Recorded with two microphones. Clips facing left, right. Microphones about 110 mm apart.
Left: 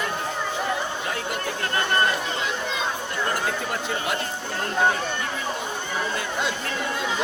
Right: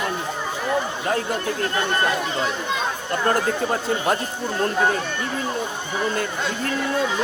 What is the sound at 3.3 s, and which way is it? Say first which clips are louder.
Speech: right 7 dB; 40° right (ahead or behind).